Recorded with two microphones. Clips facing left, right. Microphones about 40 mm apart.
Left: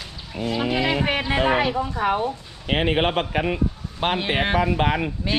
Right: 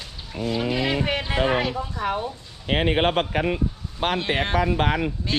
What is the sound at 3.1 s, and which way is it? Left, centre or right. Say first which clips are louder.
Speech: even; left.